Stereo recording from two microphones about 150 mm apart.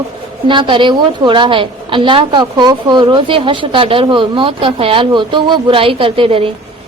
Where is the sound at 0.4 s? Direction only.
35° right (ahead or behind).